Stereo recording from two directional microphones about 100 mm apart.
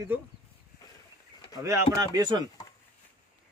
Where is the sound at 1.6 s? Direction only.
35° right (ahead or behind).